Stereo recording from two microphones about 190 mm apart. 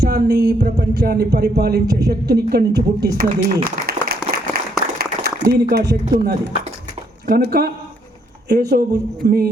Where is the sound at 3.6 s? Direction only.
55° right (ahead or behind).